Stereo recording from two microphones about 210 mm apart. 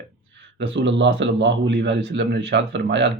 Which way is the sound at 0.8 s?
60° right (ahead or behind).